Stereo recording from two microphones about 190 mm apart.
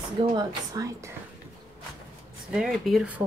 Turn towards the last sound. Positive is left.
turn(degrees=-5)  # may be behind; listen again after turning